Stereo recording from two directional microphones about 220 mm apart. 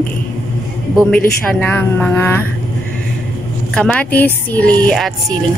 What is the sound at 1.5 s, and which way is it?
Speech, 5° left (ahead or behind).